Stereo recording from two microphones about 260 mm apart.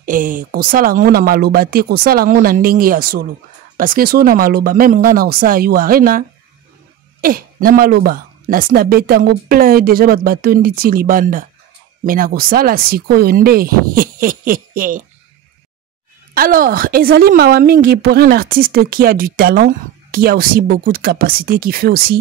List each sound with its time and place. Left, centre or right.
0.0 s a woman's voice: right
16.3 s a woman's voice: right